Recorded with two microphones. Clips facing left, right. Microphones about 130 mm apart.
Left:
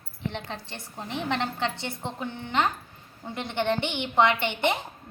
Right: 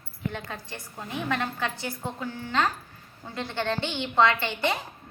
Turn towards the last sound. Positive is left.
turn(degrees=20)  # may be behind; listen again after turning